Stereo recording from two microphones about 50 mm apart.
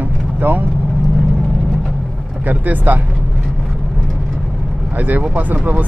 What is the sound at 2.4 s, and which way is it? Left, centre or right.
Speech, right.